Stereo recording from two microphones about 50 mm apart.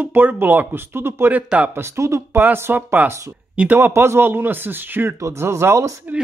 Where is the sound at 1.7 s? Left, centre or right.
Right.